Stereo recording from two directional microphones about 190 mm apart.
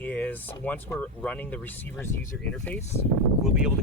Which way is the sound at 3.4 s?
5° right (ahead or behind).